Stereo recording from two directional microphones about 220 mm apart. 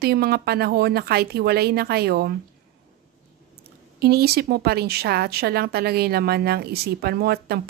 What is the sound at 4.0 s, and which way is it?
Speech, 45° right (ahead or behind).